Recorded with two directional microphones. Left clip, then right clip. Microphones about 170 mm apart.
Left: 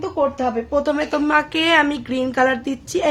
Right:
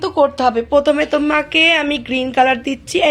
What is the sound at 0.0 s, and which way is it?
Speech, 40° right (ahead or behind).